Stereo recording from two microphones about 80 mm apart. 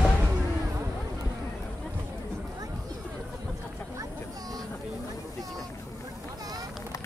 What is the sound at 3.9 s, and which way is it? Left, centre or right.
Vehicle, right.